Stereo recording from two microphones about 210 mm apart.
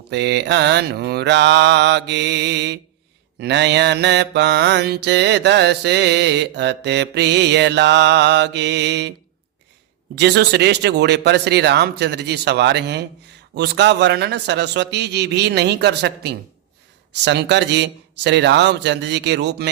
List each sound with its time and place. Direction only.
0.1 s mantra: 55° right (ahead or behind)
10.2 s speech: 55° right (ahead or behind)
17.1 s mantra: 55° right (ahead or behind)